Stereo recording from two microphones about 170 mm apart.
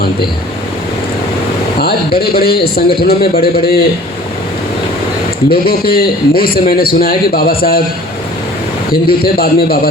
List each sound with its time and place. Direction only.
2.1 s a man's voice: 65° left (ahead or behind)
5.5 s a man's voice: 65° left (ahead or behind)
8.9 s a man's voice: 60° left (ahead or behind)